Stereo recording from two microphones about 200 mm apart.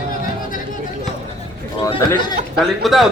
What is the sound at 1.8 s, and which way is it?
Speech, 20° left (ahead or behind).